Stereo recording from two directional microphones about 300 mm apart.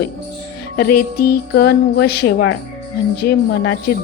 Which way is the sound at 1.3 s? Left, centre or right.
Left.